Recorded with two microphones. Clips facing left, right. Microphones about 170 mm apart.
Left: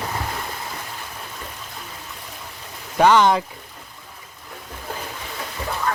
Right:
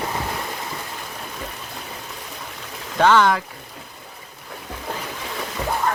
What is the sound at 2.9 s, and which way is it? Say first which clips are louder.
Speech: left 1 dB; 15° left (ahead or behind).